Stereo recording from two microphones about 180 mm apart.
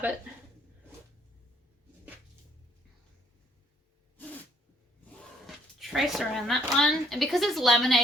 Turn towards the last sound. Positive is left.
turn(degrees=0)  # may be behind; listen again after turning